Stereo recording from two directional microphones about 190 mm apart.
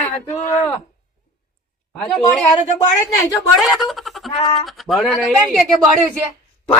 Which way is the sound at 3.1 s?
15° left (ahead or behind).